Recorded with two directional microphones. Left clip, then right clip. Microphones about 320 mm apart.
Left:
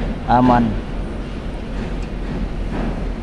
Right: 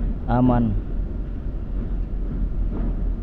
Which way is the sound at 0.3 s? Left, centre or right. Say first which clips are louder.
Left 8 dB; centre.